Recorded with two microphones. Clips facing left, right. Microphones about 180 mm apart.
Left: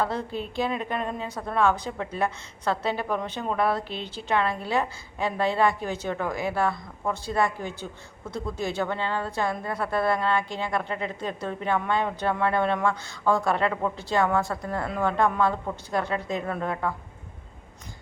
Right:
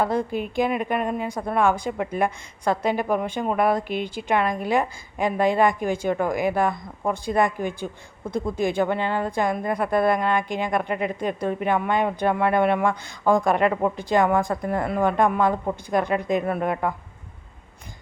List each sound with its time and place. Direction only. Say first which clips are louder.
0.0 s a woman's voice: right 5 dB; 15° right (ahead or behind)